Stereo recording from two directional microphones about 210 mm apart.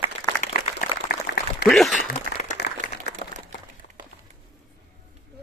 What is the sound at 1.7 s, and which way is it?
Speech, centre (ahead or behind).